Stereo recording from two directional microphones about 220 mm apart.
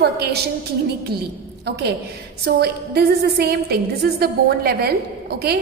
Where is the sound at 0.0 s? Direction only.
45° right (ahead or behind).